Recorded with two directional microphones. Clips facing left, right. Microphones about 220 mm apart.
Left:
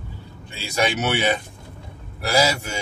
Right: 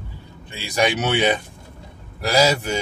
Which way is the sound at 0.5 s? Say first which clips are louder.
Right 2 dB; 15° right (ahead or behind).